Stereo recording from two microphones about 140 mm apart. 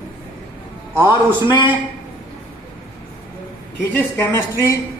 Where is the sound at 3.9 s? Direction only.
15° left (ahead or behind).